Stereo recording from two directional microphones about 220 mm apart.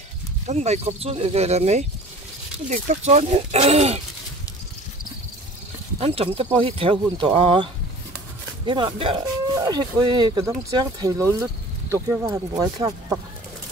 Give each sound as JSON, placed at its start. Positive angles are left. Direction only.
{"t": 0.5, "sound": "speech", "side_deg": -30}
{"t": 5.9, "sound": "speech", "side_deg": -25}